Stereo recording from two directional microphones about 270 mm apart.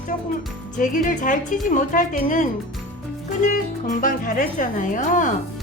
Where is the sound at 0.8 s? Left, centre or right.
Left.